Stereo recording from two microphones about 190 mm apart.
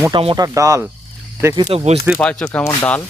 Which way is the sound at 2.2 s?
5° left (ahead or behind).